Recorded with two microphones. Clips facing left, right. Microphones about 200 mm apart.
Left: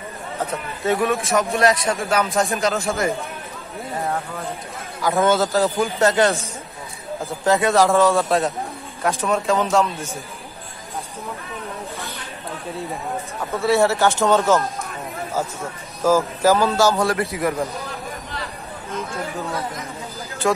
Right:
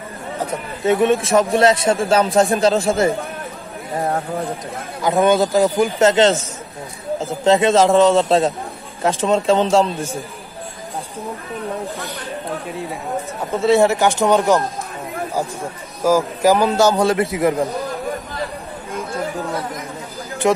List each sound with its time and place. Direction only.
0.4 s a man's voice: 15° right (ahead or behind); by 4.5 s 40° right (ahead or behind)
5.0 s speech: 15° right (ahead or behind)
7.4 s a man's voice: 20° right (ahead or behind)
13.5 s speech: 20° right (ahead or behind)
16.0 s a man's voice: 15° right (ahead or behind)
20.4 s speech: 20° right (ahead or behind)